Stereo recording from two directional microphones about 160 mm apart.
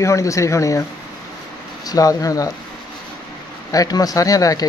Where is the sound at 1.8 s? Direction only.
20° left (ahead or behind).